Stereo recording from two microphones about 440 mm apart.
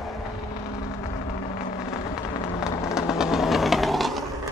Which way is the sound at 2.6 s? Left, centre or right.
Centre.